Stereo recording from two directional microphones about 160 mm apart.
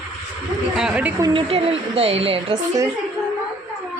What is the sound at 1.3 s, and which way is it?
A woman's voice, 35° right (ahead or behind).